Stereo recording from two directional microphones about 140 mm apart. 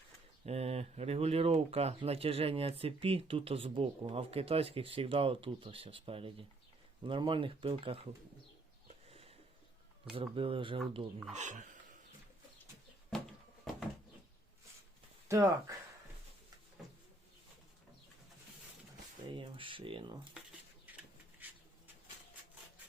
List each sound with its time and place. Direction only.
0.4 s speech: 50° right (ahead or behind)
9.0 s a sound: 45° right (ahead or behind)
10.2 s speech: 40° right (ahead or behind)
11.3 s speech: 65° right (ahead or behind)
15.3 s speech: 25° right (ahead or behind)
19.3 s speech: 35° right (ahead or behind)
21.4 s a sound: 10° right (ahead or behind)